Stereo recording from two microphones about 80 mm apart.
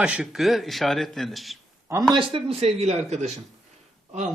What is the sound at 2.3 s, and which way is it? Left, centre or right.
Speech, right.